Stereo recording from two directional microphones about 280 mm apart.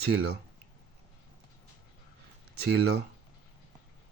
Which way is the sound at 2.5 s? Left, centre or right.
Right.